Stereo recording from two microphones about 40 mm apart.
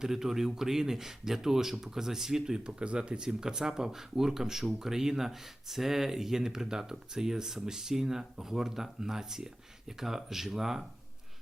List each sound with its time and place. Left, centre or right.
0.0 s speech: centre
2.6 s speech: right; by 10.8 s centre